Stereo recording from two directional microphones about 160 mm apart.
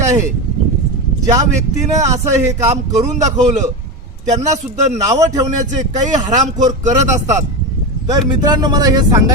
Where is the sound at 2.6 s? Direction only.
45° right (ahead or behind).